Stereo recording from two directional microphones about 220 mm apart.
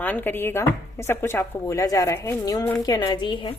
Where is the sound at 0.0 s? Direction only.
10° left (ahead or behind).